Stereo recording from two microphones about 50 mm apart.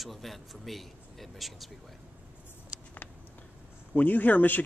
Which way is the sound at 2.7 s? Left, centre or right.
Right.